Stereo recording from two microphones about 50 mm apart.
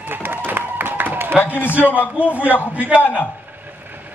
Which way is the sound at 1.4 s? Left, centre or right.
Left.